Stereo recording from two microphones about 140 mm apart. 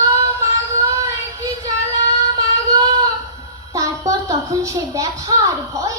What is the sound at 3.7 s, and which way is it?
A child's voice, 25° right (ahead or behind).